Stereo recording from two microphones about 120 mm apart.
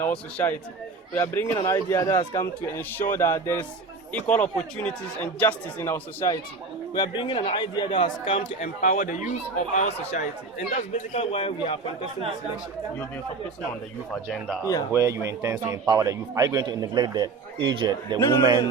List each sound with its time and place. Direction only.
0.0 s a man's voice: 15° left (ahead or behind)
4.1 s speech: 10° left (ahead or behind)
6.9 s a man's voice: 35° left (ahead or behind)
8.6 s a man's voice: 90° left
9.7 s speech: 70° left (ahead or behind)
10.9 s a man's voice: 55° left (ahead or behind)
14.6 s a man's voice: 25° left (ahead or behind)
14.9 s speech: 25° right (ahead or behind); by 18.2 s 40° right (ahead or behind)